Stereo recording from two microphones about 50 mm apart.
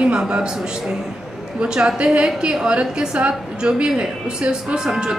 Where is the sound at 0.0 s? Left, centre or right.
Right.